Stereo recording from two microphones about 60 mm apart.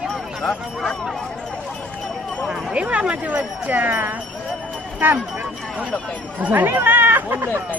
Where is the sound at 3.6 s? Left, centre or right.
Right.